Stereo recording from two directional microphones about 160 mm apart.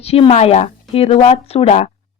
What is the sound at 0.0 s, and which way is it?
Speech, 40° left (ahead or behind).